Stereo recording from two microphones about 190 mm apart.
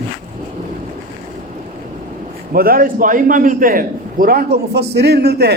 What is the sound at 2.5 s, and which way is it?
A man's voice, 50° right (ahead or behind).